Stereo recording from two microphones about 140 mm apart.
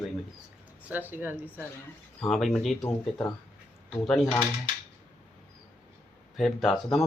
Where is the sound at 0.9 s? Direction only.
15° right (ahead or behind).